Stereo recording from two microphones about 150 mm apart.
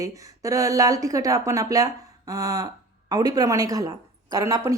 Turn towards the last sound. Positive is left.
turn(degrees=-20)  # may be behind; listen again after turning